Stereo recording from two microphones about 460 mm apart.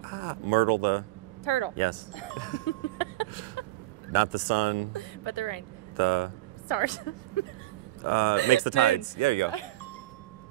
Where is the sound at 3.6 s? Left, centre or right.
Left.